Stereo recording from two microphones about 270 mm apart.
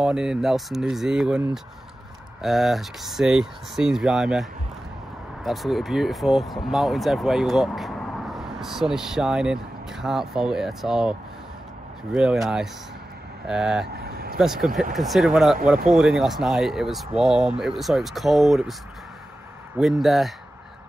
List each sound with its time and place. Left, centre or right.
0.0 s speech: centre
13.9 s vehicle: right
14.4 s speech: centre
19.8 s speech: centre